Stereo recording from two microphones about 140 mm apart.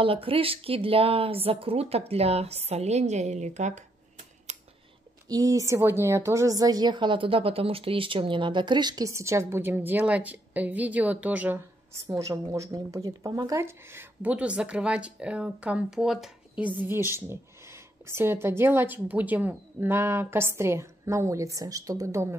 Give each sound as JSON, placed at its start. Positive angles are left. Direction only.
{"t": 0.0, "sound": "speech", "side_deg": -40}
{"t": 4.5, "sound": "scissors", "side_deg": -55}
{"t": 5.3, "sound": "a woman's voice", "side_deg": -25}
{"t": 12.1, "sound": "a woman's voice", "side_deg": -25}